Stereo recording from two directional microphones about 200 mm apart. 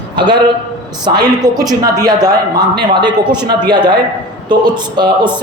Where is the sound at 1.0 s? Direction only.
20° right (ahead or behind).